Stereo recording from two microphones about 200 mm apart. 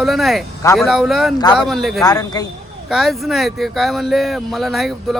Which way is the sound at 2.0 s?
20° left (ahead or behind).